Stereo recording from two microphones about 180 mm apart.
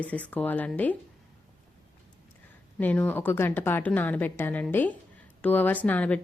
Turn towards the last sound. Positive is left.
turn(degrees=10)  # may be behind; listen again after turning